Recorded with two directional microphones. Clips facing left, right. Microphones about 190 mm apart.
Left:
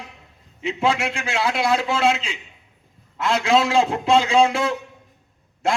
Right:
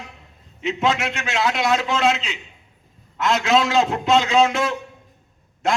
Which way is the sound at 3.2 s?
30° left (ahead or behind).